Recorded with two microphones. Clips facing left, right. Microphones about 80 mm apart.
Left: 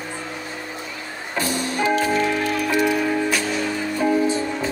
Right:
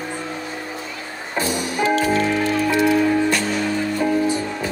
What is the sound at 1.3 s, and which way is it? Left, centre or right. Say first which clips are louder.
Music: right 1 dB; centre.